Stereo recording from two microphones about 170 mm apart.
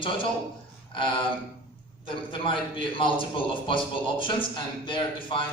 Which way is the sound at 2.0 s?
30° left (ahead or behind).